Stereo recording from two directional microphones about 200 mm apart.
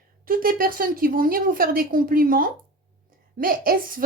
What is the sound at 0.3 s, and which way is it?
A woman's voice, 45° right (ahead or behind).